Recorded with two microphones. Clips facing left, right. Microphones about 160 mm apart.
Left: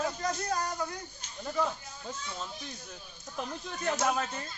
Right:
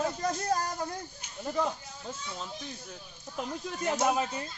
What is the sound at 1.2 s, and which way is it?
Speech, 15° right (ahead or behind).